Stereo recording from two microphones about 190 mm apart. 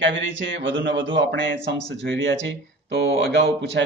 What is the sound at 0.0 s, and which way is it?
Speech, 75° right (ahead or behind).